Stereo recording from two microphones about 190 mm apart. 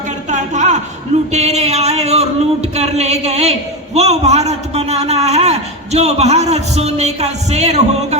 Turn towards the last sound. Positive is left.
turn(degrees=-35)  # may be behind; listen again after turning